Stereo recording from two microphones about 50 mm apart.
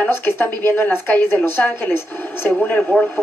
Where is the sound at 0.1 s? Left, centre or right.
Left.